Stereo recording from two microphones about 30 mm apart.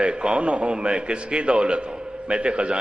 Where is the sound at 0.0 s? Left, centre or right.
Right.